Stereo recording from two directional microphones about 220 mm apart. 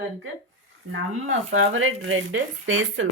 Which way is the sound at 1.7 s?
65° right (ahead or behind).